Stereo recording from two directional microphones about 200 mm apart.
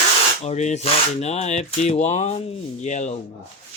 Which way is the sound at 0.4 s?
35° left (ahead or behind).